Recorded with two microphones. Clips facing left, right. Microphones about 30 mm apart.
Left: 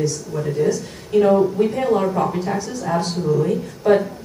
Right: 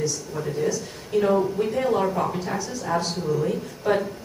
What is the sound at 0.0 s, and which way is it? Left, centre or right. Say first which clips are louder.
Speech: left 5 dB; centre.